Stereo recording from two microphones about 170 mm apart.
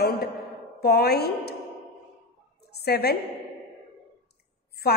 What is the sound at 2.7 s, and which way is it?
Speech, 70° left (ahead or behind).